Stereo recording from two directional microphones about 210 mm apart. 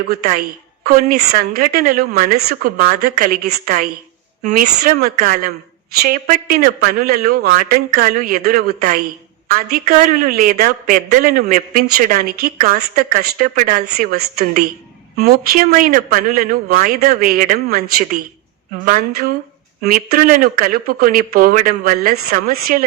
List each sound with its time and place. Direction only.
0.1 s a man's voice: 45° right (ahead or behind)
19.8 s a man's voice: 40° right (ahead or behind)